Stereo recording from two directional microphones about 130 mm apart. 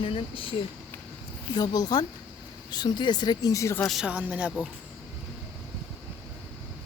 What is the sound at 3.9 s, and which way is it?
Speech, 5° right (ahead or behind).